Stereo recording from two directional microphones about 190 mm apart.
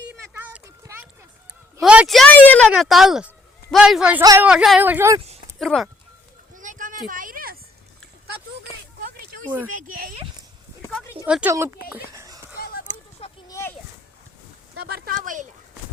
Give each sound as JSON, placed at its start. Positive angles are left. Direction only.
{"t": 0.1, "sound": "a sound", "side_deg": -10}
{"t": 1.8, "sound": "speech", "side_deg": -5}
{"t": 4.2, "sound": "a woman's voice", "side_deg": -20}
{"t": 4.4, "sound": "speech", "side_deg": -5}
{"t": 5.5, "sound": "speech", "side_deg": 0}
{"t": 6.5, "sound": "a sound", "side_deg": -45}
{"t": 9.8, "sound": "speech", "side_deg": -45}
{"t": 11.3, "sound": "speech", "side_deg": -5}
{"t": 12.1, "sound": "a sound", "side_deg": -15}
{"t": 13.5, "sound": "children playing", "side_deg": 15}
{"t": 14.8, "sound": "speech", "side_deg": -55}